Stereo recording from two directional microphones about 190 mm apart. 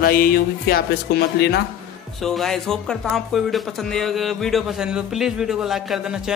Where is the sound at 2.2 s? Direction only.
Centre (ahead or behind).